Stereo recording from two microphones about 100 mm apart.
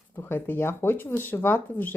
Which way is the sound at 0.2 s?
20° left (ahead or behind).